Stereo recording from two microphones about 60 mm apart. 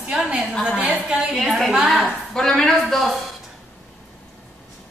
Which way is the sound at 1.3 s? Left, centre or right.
Centre.